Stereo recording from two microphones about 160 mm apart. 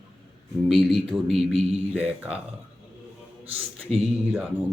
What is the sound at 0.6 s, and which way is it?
Speech, centre (ahead or behind).